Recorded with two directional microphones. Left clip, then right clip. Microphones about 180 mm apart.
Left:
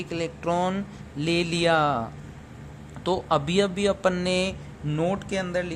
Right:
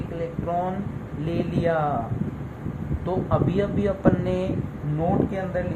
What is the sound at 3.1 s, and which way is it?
Speech, 75° left (ahead or behind).